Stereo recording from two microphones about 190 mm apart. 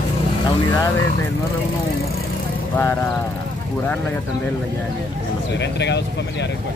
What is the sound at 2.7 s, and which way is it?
Speech, 10° left (ahead or behind).